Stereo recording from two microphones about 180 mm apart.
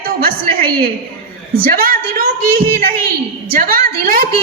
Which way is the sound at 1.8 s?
55° right (ahead or behind).